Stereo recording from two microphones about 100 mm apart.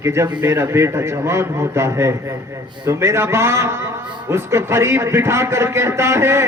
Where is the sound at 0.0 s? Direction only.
30° right (ahead or behind).